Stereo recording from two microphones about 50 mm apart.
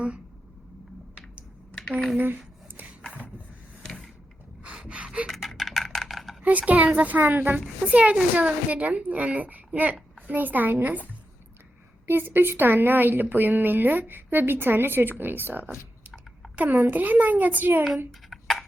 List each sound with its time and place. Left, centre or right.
1.9 s speech: centre
2.1 s a woman's voice: right
3.1 s a sound: right
4.6 s gasp: centre
5.2 s a sound: centre
6.4 s a woman's voice: right
7.9 s a woman's voice: right
12.0 s a woman's voice: right
18.3 s a sound: centre